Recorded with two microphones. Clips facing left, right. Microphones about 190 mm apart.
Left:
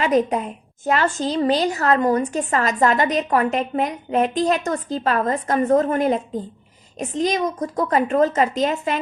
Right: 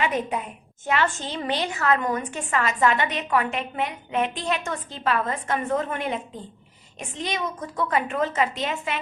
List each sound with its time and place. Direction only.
0.0 s a woman's voice: 40° left (ahead or behind)